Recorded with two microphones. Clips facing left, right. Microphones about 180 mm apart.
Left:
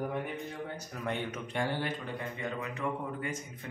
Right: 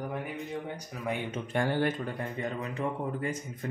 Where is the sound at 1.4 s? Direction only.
50° right (ahead or behind).